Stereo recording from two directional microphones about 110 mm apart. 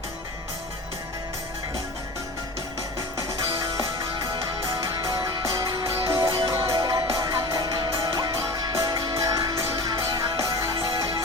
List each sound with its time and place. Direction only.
5.4 s music: 30° right (ahead or behind)